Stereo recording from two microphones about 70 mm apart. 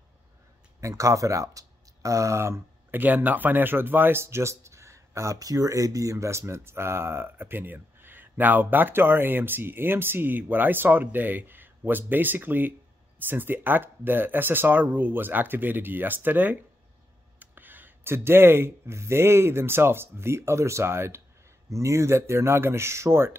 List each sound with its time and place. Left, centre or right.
0.7 s speech: right
2.9 s speech: right